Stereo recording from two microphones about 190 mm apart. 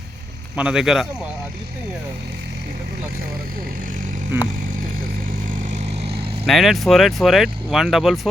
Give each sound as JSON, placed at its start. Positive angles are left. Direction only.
{"t": 0.5, "sound": "speech", "side_deg": -5}
{"t": 5.5, "sound": "vehicle", "side_deg": -40}
{"t": 6.5, "sound": "speech", "side_deg": 0}